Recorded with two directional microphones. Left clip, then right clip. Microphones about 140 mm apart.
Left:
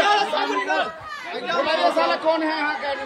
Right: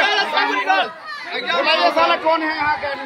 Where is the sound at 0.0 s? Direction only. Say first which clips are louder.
Right 2 dB; 30° right (ahead or behind).